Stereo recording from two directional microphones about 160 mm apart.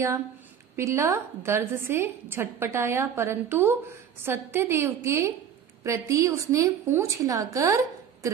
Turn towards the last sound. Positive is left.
turn(degrees=-20)  # may be behind; listen again after turning